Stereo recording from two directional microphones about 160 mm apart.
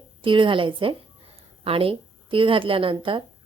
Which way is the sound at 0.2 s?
30° right (ahead or behind).